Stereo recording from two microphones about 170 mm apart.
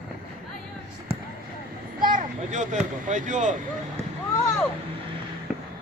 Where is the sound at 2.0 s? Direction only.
50° right (ahead or behind).